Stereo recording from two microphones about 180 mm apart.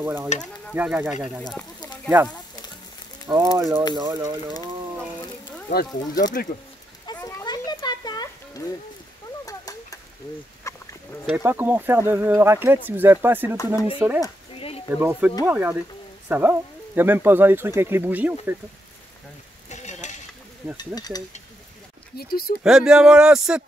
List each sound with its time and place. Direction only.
0.0 s speech: 10° right (ahead or behind)
1.4 s speech: 5° left (ahead or behind)
2.1 s speech: 10° right (ahead or behind)
5.7 s speech: 60° left (ahead or behind)
7.2 s a sound: 20° left (ahead or behind)
9.5 s tick-tock: 20° left (ahead or behind)
10.7 s chicken: 15° left (ahead or behind)
11.2 s speech: 10° right (ahead or behind)
14.5 s a sound: 30° left (ahead or behind)
15.0 s speech: 10° right (ahead or behind)
19.7 s stir: 40° left (ahead or behind)
20.7 s speech: 20° left (ahead or behind)
22.1 s speech: 60° left (ahead or behind)
22.6 s speech: 5° right (ahead or behind)